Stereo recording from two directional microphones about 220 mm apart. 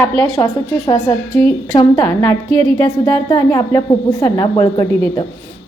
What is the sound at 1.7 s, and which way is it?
Speech, 15° left (ahead or behind).